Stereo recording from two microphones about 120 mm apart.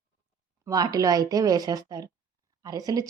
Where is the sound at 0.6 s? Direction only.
30° right (ahead or behind).